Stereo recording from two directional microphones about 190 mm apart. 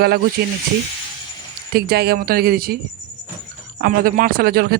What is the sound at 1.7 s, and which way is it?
Speech, 55° right (ahead or behind).